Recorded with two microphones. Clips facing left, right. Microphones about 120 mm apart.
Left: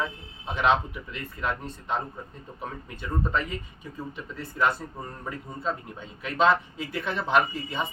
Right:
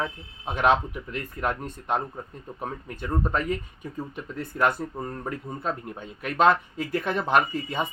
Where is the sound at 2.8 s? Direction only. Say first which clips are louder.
Right 2 dB; 45° right (ahead or behind).